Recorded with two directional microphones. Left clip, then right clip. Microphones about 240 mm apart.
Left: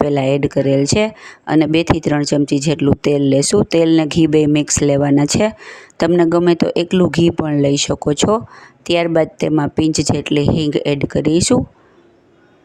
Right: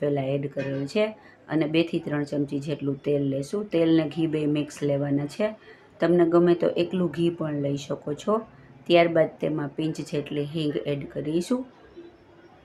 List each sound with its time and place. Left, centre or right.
0.1 s speech: left